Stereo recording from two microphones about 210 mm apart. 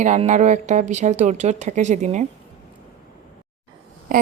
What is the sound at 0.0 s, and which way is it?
A woman's voice, 35° right (ahead or behind).